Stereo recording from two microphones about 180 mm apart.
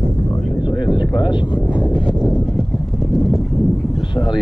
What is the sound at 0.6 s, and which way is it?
Vehicle, 25° left (ahead or behind).